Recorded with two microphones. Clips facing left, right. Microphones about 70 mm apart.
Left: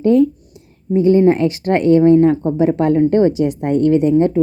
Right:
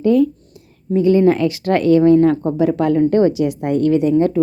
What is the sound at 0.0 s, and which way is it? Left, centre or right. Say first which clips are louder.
A woman's voice: left 2 dB; left.